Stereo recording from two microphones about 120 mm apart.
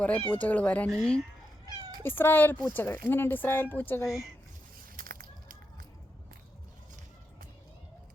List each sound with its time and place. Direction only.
0.3 s speech: 10° left (ahead or behind)
2.0 s speech: 20° left (ahead or behind)
4.0 s speech: centre (ahead or behind)